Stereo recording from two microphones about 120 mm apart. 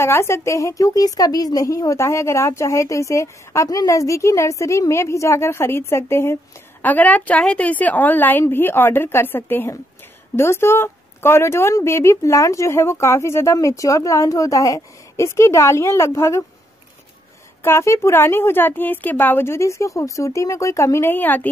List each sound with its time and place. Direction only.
0.0 s a woman's voice: 20° left (ahead or behind)
17.6 s a woman's voice: 25° left (ahead or behind)